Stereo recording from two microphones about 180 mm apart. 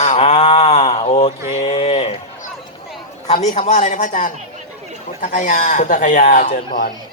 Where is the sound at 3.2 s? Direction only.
40° left (ahead or behind).